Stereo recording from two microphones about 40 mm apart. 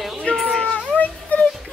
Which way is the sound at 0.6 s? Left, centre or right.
Left.